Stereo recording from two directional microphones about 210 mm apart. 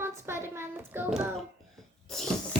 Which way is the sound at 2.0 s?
Centre (ahead or behind).